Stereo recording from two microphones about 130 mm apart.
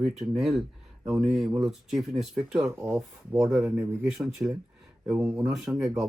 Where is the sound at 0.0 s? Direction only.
5° right (ahead or behind).